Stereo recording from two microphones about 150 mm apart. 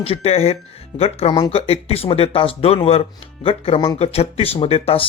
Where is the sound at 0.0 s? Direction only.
40° left (ahead or behind).